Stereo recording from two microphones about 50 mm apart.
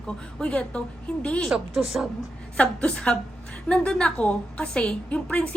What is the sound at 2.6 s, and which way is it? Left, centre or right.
A woman's voice, left.